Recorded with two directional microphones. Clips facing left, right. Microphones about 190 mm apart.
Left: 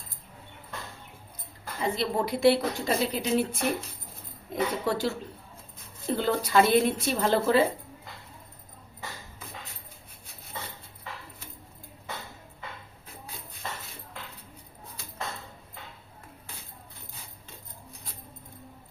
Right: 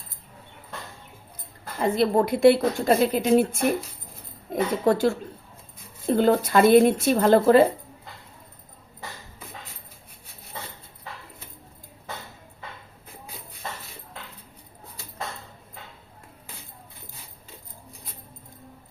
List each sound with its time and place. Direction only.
1.8 s a woman's voice: 50° right (ahead or behind)
6.1 s a woman's voice: 50° right (ahead or behind)